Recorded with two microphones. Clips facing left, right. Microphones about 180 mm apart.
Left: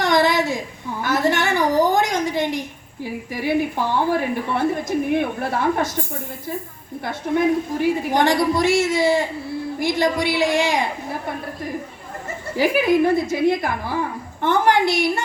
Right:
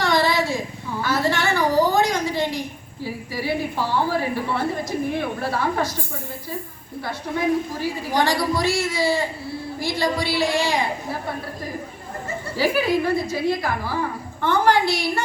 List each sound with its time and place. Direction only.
0.0 s a sound: 20° left (ahead or behind)
1.0 s a woman's voice: 20° left (ahead or behind)
7.8 s a woman's voice: 20° left (ahead or behind)
12.5 s a woman's voice: 20° left (ahead or behind)